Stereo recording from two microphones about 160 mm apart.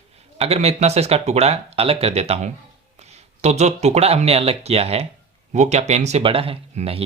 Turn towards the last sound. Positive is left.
turn(degrees=-40)  # may be behind; listen again after turning